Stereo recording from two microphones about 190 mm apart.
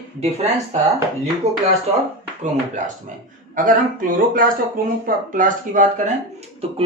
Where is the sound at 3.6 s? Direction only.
45° right (ahead or behind).